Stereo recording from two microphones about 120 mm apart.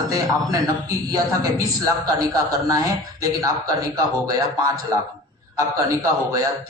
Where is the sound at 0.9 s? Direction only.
30° right (ahead or behind).